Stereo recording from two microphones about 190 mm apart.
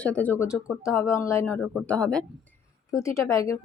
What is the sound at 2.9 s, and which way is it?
Speech, 15° left (ahead or behind).